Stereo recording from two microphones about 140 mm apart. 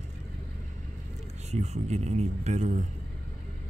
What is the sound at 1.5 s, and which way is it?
Speech, 50° right (ahead or behind).